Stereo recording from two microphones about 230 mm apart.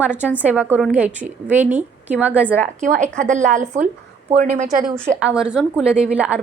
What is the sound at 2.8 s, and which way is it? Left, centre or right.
Speech, right.